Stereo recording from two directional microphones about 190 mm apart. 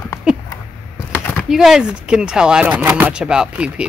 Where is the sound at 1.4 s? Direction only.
Centre (ahead or behind).